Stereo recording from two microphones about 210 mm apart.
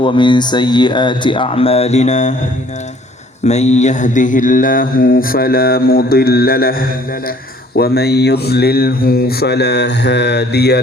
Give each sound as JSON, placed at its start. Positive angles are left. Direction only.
{"t": 0.0, "sound": "speech", "side_deg": 20}
{"t": 3.4, "sound": "mantra", "side_deg": 30}